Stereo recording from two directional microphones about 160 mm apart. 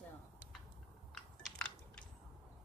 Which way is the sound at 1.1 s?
5° left (ahead or behind).